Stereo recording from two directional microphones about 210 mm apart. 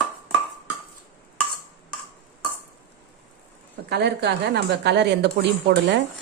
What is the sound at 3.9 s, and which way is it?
A woman's voice, 50° right (ahead or behind).